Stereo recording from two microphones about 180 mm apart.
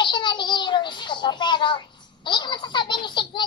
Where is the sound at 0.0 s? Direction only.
25° left (ahead or behind).